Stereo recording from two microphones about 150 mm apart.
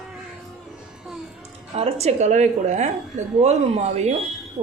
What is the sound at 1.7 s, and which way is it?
A woman's voice, 45° right (ahead or behind).